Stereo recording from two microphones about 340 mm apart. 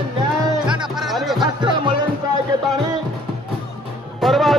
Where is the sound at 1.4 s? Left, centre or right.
Centre.